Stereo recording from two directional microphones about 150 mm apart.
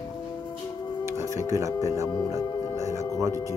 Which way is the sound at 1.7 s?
20° left (ahead or behind).